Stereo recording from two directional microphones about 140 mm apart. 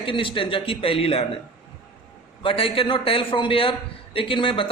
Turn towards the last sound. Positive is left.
turn(degrees=40)  # may be behind; listen again after turning